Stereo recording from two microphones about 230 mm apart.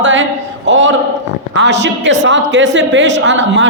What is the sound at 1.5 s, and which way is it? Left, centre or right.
A woman's voice, right.